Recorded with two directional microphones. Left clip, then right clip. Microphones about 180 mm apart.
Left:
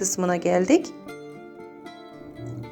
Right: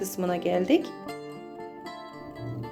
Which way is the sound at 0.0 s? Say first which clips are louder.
Left 4 dB; 20° left (ahead or behind).